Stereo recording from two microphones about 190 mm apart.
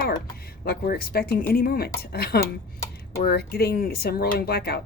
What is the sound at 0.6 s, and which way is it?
Speech, 55° left (ahead or behind).